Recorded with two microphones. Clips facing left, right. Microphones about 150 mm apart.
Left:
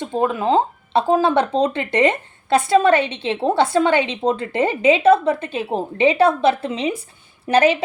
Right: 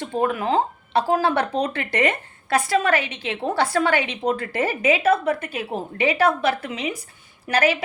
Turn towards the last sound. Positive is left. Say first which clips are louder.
# left 5 dB
turn(degrees=25)  # may be behind; listen again after turning